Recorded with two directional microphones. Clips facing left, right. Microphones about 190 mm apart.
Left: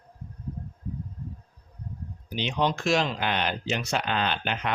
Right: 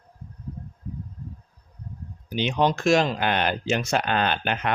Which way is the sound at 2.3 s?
50° right (ahead or behind).